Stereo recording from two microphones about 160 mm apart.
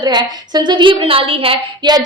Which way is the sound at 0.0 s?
25° right (ahead or behind).